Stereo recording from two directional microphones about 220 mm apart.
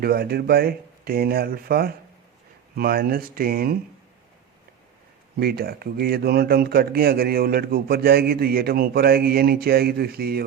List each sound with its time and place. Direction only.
0.0 s speech: 45° right (ahead or behind)
5.4 s speech: 45° right (ahead or behind)